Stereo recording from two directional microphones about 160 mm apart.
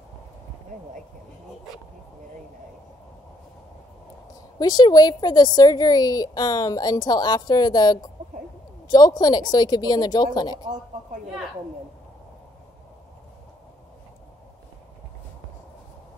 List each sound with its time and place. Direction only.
4.6 s a woman's voice: 25° left (ahead or behind)
8.2 s a sound: 50° right (ahead or behind)
8.8 s a woman's voice: 25° left (ahead or behind)